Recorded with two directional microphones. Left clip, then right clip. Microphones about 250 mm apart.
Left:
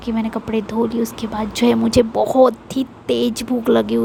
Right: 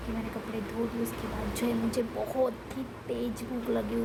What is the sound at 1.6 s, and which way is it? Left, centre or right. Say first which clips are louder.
Speech: left 16 dB; left.